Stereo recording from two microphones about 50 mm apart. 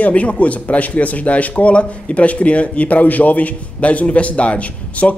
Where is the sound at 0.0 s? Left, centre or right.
Left.